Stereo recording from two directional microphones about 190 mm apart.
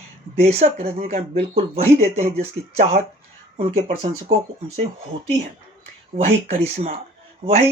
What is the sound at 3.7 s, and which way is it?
Speech, 35° right (ahead or behind).